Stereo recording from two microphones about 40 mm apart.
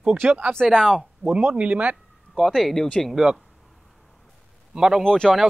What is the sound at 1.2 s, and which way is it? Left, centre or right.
Speech, left.